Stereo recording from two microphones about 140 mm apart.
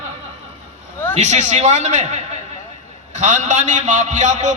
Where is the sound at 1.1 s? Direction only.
55° right (ahead or behind).